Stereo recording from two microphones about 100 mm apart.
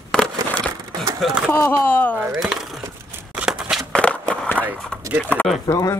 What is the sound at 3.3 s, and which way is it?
Shuffling cards, 10° right (ahead or behind).